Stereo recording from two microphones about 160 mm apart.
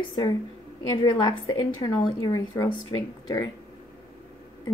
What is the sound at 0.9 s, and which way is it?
A woman's voice, 25° left (ahead or behind).